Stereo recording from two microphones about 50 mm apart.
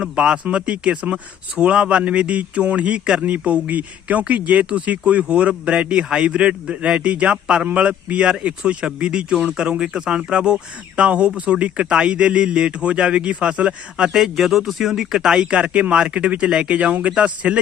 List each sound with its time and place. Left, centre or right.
0.0 s speech: centre
3.2 s speech: right
14.1 s speech: centre; by 17.6 s right